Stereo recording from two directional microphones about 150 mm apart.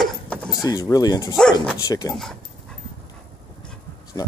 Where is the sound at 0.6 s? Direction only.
25° left (ahead or behind).